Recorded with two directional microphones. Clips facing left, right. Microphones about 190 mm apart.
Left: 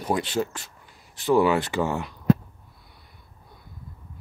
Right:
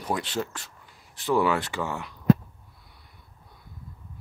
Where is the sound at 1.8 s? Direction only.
25° left (ahead or behind).